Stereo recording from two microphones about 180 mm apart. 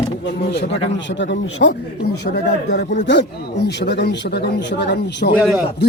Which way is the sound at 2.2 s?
65° left (ahead or behind).